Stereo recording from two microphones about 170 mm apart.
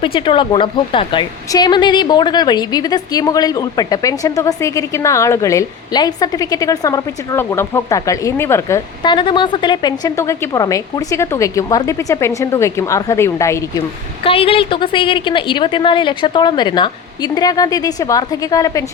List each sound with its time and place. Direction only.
0.0 s a woman's voice: 30° left (ahead or behind)
9.0 s a woman's voice: 25° left (ahead or behind)
14.3 s a woman's voice: 35° left (ahead or behind)